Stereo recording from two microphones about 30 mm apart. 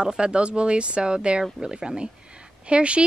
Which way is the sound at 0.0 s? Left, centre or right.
Right.